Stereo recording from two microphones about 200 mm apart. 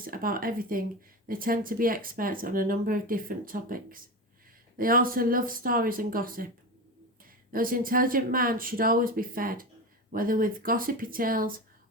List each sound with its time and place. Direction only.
0.0 s speech: 45° right (ahead or behind)
4.8 s speech: 45° right (ahead or behind)